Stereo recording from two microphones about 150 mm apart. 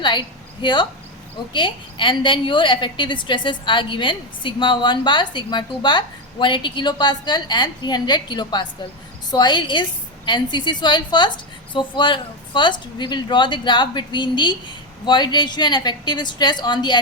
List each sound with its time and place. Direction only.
0.6 s a woman's voice: 30° left (ahead or behind)